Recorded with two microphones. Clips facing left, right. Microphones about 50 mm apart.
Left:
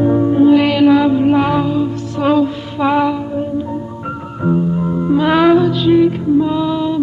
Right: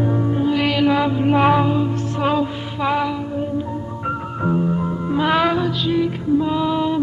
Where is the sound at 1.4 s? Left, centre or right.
Centre.